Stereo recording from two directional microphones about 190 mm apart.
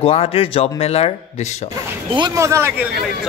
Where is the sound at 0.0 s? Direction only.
30° left (ahead or behind).